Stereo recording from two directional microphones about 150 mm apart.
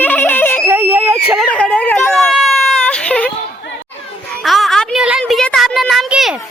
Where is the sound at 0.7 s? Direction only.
10° right (ahead or behind).